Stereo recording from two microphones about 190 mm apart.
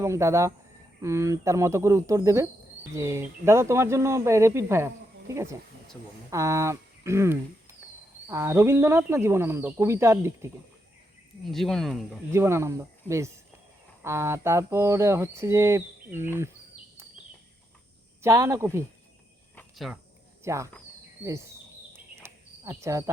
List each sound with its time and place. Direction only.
0.0 s speech: 15° right (ahead or behind)
11.5 s speech: centre (ahead or behind)
12.3 s speech: 15° right (ahead or behind)
18.2 s speech: 15° right (ahead or behind)
19.5 s cricket: centre (ahead or behind)
20.4 s speech: 15° right (ahead or behind)
22.2 s cricket: 15° right (ahead or behind)